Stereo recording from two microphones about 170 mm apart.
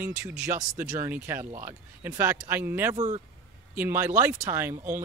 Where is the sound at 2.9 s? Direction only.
40° right (ahead or behind).